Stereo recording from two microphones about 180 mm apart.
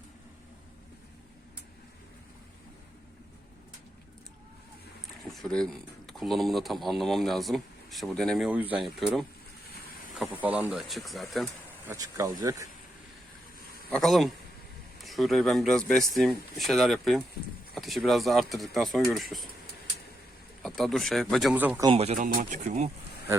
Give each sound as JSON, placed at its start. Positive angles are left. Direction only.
{"t": 5.2, "sound": "speech", "side_deg": 0}
{"t": 11.9, "sound": "speech", "side_deg": -20}
{"t": 13.9, "sound": "speech", "side_deg": 0}
{"t": 20.6, "sound": "speech", "side_deg": 0}
{"t": 21.5, "sound": "speech", "side_deg": -10}
{"t": 21.8, "sound": "speech", "side_deg": -35}
{"t": 22.2, "sound": "speech", "side_deg": -45}